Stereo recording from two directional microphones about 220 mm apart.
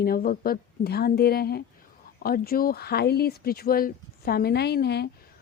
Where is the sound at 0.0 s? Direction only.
40° left (ahead or behind).